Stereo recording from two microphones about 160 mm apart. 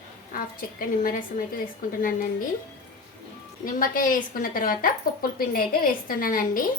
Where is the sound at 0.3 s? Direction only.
60° left (ahead or behind).